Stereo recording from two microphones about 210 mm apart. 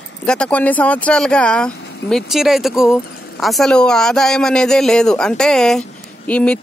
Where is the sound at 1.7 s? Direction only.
55° left (ahead or behind).